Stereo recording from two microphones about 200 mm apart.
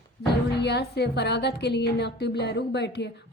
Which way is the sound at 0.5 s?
55° left (ahead or behind).